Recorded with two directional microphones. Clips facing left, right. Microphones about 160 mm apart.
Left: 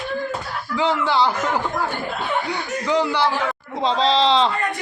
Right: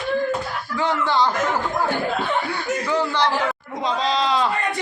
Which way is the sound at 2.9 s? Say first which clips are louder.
Left 3 dB; 10° left (ahead or behind).